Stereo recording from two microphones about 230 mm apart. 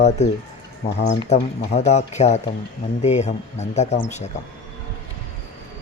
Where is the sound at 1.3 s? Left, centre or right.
Left.